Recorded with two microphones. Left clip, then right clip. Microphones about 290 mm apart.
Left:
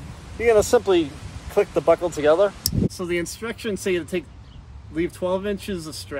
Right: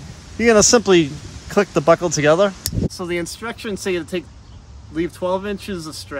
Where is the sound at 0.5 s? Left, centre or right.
Right.